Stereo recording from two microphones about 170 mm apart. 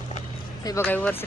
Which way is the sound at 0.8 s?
10° left (ahead or behind).